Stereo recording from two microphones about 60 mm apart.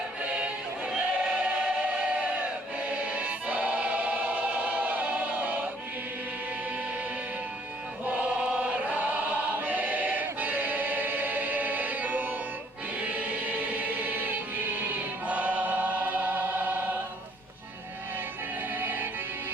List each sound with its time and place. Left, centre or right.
0.3 s choir: centre
8.0 s choir: right
18.7 s music: right